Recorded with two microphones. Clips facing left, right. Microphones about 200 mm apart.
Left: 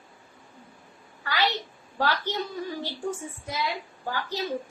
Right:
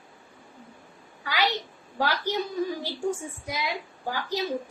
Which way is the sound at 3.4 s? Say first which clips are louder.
Left 1 dB; 15° right (ahead or behind).